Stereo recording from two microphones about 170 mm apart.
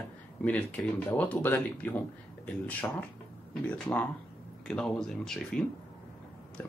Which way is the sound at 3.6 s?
5° left (ahead or behind).